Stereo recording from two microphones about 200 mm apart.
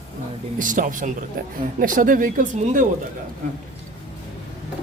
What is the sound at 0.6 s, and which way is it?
Speech, 40° right (ahead or behind).